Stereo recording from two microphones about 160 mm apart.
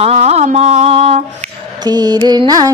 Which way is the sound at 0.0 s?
40° right (ahead or behind).